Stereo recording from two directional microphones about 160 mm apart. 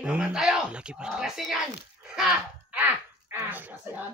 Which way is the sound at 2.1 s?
5° right (ahead or behind).